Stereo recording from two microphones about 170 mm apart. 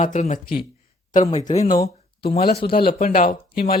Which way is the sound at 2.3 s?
65° left (ahead or behind).